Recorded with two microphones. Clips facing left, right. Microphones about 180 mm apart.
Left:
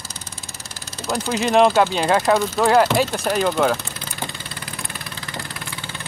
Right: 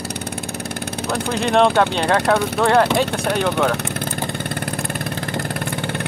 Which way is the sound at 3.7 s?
65° right (ahead or behind).